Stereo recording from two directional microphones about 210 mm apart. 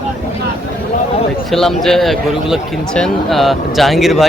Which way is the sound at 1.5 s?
Centre (ahead or behind).